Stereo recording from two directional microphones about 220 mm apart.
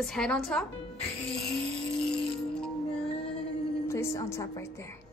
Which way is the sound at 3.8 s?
15° left (ahead or behind).